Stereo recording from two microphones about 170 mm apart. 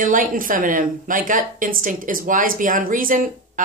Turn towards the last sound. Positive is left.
turn(degrees=-55)  # may be behind; listen again after turning